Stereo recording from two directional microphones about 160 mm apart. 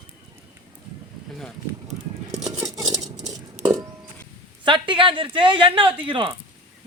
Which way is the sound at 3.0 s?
50° right (ahead or behind).